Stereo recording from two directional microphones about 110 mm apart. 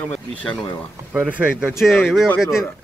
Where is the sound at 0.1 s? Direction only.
5° left (ahead or behind).